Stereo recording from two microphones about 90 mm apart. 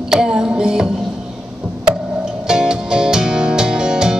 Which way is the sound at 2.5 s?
5° right (ahead or behind).